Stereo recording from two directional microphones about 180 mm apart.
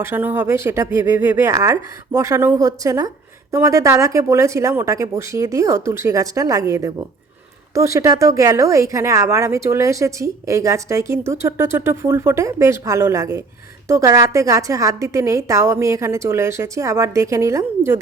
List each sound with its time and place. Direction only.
0.0 s speech: 10° right (ahead or behind)